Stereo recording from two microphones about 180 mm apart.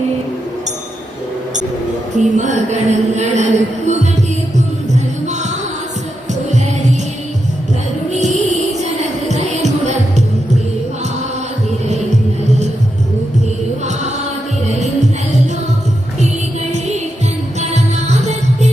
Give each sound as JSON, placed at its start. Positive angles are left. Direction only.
{"t": 2.1, "sound": "speech", "side_deg": -45}
{"t": 5.2, "sound": "music", "side_deg": -40}
{"t": 8.1, "sound": "a sound", "side_deg": -40}
{"t": 8.8, "sound": "music", "side_deg": -40}
{"t": 12.5, "sound": "music", "side_deg": -40}
{"t": 14.8, "sound": "music", "side_deg": -40}
{"t": 16.7, "sound": "music", "side_deg": -40}